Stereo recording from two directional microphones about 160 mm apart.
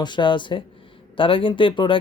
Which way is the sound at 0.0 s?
30° left (ahead or behind).